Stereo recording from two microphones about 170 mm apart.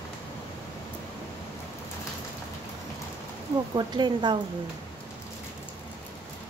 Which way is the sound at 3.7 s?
25° right (ahead or behind).